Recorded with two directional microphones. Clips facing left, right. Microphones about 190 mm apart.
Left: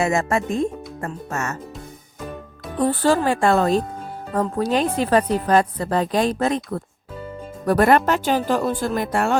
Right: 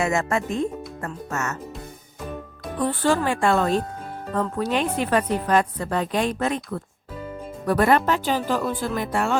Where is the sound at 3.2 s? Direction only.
40° left (ahead or behind).